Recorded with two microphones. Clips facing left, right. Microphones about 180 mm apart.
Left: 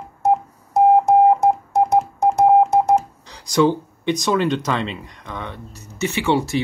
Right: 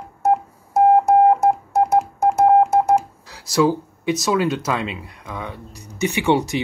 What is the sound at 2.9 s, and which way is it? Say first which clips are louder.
Speech: even; 5° right (ahead or behind).